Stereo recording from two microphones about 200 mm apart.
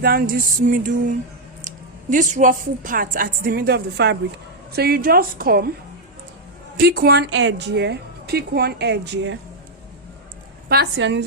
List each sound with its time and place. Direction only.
0.0 s music: 50° right (ahead or behind)
1.6 s speech: 40° right (ahead or behind)
6.7 s a woman's voice: 50° right (ahead or behind)
10.7 s a woman's voice: 60° right (ahead or behind)